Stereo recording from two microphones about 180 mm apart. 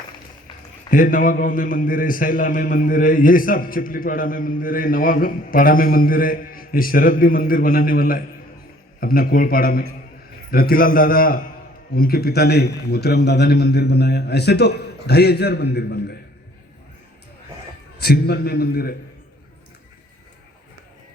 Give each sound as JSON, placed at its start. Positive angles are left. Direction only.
{"t": 0.9, "sound": "a man's voice", "side_deg": 50}
{"t": 18.0, "sound": "a man's voice", "side_deg": 65}